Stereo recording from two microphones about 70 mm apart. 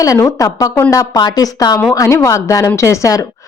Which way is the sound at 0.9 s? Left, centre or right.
Left.